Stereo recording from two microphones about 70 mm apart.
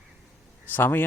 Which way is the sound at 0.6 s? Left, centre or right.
Left.